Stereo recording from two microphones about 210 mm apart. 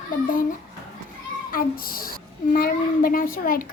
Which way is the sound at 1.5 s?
45° left (ahead or behind).